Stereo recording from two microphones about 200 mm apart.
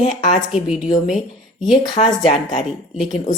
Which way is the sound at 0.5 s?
5° right (ahead or behind).